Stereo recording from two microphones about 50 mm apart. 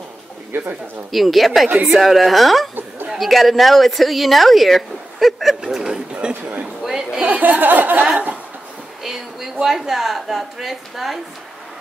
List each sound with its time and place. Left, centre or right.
0.5 s speech: right
1.1 s speech: centre
6.2 s speech: right
6.8 s chatter: centre
7.2 s a sound: right
9.0 s a woman's voice: centre